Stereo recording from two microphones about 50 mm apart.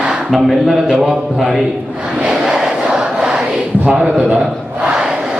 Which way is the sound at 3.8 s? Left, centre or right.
Right.